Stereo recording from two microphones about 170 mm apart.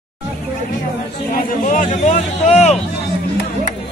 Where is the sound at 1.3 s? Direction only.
50° left (ahead or behind).